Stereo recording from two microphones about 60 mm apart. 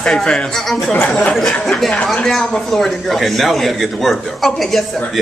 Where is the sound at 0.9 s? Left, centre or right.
Centre.